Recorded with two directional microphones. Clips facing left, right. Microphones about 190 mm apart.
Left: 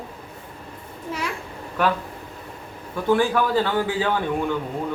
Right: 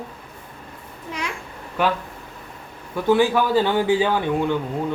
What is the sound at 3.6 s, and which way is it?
Speech, 15° right (ahead or behind).